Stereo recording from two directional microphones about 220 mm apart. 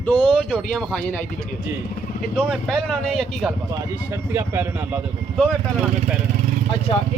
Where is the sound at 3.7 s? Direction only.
10° right (ahead or behind).